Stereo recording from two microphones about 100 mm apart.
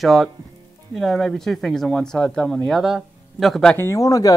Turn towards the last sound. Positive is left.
turn(degrees=35)  # may be behind; listen again after turning